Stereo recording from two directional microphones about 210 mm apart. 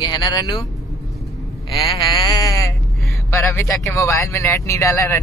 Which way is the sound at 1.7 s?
20° left (ahead or behind).